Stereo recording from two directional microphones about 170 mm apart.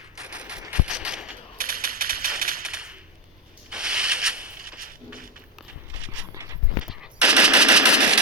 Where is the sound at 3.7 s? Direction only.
5° right (ahead or behind).